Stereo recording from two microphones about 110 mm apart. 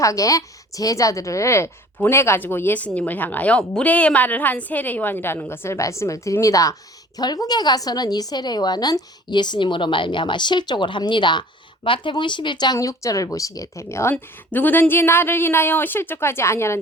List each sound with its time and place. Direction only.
0.0 s a woman's voice: 30° left (ahead or behind)